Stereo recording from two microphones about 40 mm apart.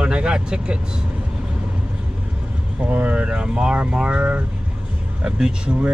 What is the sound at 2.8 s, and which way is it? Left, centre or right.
Speech, right.